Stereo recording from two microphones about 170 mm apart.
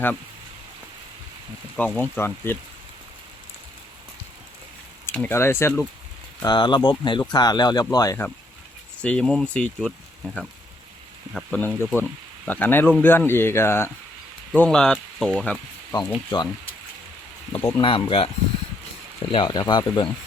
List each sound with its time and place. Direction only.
1.7 s speech: 10° left (ahead or behind)
5.0 s speech: 10° left (ahead or behind)
6.4 s speech: 25° left (ahead or behind)
9.0 s speech: 5° left (ahead or behind)
16.1 s speech: 25° left (ahead or behind)
17.7 s speech: 30° left (ahead or behind)
19.3 s speech: 25° left (ahead or behind)